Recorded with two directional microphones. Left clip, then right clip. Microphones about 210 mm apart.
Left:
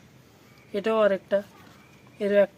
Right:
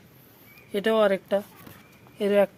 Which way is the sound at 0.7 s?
20° right (ahead or behind).